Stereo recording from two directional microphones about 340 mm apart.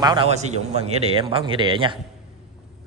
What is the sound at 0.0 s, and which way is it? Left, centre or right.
A man's voice, centre.